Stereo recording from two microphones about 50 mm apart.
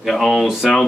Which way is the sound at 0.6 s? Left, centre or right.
Centre.